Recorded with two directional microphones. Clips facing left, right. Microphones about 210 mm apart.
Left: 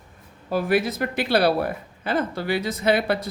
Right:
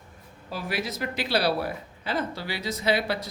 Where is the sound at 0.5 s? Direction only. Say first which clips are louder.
Left 10 dB; 55° left (ahead or behind).